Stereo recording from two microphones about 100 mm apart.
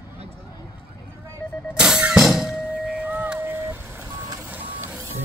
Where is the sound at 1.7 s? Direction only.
5° right (ahead or behind).